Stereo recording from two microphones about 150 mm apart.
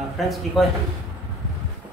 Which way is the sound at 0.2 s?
Centre (ahead or behind).